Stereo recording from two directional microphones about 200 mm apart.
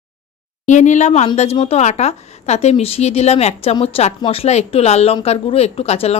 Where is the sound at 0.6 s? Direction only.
35° left (ahead or behind).